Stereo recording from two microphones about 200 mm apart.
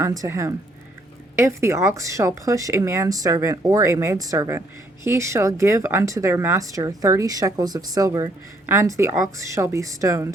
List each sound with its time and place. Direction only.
0.0 s speech: 15° right (ahead or behind)